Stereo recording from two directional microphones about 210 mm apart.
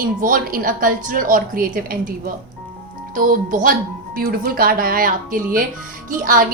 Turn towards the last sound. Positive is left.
turn(degrees=-40)  # may be behind; listen again after turning